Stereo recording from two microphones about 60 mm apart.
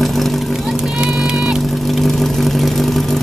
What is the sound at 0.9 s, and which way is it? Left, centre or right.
Vehicle, centre.